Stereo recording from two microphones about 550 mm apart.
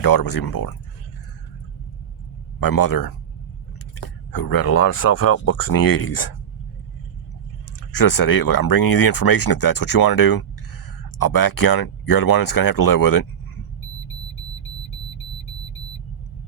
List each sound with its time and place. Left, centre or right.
0.0 s speech: left
2.6 s speech: left
4.3 s speech: left
4.7 s speech: left
5.6 s speech: left
7.9 s speech: left